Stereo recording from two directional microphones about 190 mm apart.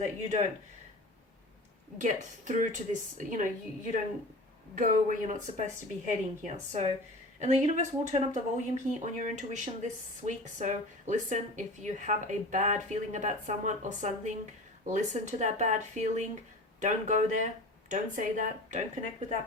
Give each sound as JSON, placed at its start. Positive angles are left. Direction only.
{"t": 0.0, "sound": "speech", "side_deg": -35}
{"t": 2.0, "sound": "speech", "side_deg": -40}
{"t": 4.7, "sound": "speech", "side_deg": -45}